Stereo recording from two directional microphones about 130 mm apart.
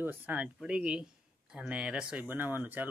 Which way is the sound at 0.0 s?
15° right (ahead or behind).